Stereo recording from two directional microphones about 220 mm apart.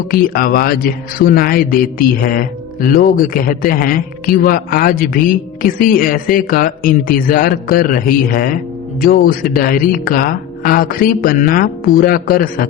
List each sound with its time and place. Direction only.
0.1 s a man's voice: 40° left (ahead or behind)